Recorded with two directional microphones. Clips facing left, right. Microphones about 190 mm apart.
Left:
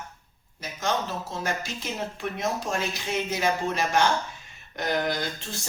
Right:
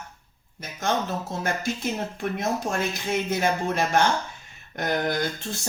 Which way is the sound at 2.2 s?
50° right (ahead or behind).